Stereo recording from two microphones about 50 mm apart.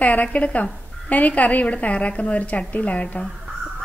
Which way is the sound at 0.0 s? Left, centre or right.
Left.